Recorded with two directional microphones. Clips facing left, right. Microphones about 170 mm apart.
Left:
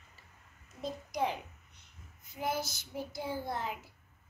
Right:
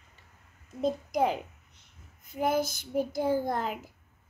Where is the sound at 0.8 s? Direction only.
50° right (ahead or behind).